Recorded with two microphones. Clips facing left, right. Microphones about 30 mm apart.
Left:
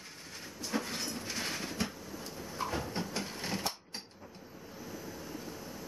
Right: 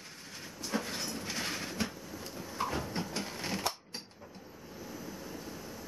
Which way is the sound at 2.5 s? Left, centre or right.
Centre.